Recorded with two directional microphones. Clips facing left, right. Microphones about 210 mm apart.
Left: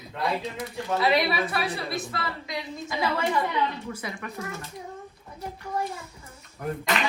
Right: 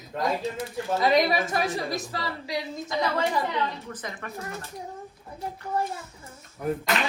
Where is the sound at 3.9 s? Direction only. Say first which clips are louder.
Left 1 dB; 10° left (ahead or behind).